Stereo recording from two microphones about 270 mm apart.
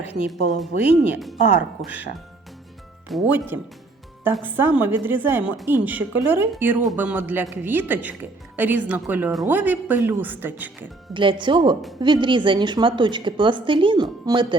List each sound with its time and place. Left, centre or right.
0.3 s speech: centre
3.1 s a woman's voice: centre
11.1 s a woman's voice: centre